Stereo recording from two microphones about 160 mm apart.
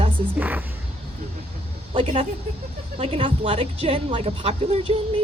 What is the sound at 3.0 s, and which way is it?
Speech, 35° right (ahead or behind).